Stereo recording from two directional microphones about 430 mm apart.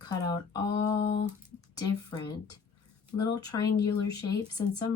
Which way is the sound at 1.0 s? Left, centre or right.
Left.